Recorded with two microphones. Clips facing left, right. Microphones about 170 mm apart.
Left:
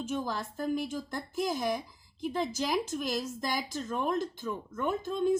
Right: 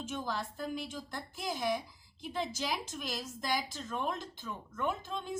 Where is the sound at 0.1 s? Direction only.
45° left (ahead or behind).